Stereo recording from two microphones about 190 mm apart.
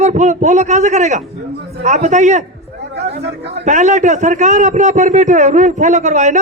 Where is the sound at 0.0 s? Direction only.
40° right (ahead or behind).